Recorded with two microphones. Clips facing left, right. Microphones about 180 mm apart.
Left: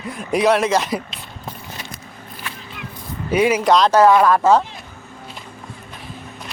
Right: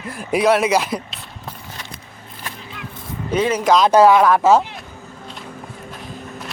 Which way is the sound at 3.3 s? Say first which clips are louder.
Left 2 dB; 10° left (ahead or behind).